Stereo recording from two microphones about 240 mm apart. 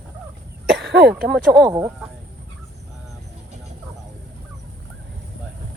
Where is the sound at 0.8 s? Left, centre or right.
Right.